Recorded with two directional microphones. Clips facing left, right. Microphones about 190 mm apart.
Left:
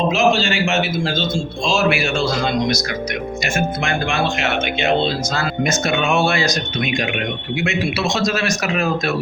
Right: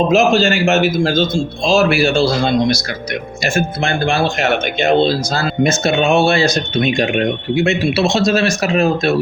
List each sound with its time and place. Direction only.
0.1 s a man's voice: 40° right (ahead or behind)